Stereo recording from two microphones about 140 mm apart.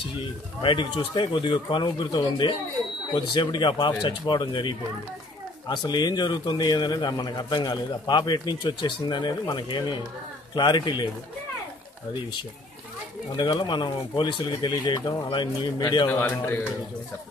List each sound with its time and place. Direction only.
0.6 s a man's voice: 35° left (ahead or behind)
13.4 s a man's voice: 35° left (ahead or behind)
16.1 s a man's voice: 15° left (ahead or behind)